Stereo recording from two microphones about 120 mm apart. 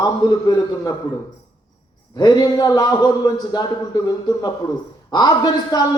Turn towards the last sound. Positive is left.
turn(degrees=35)  # may be behind; listen again after turning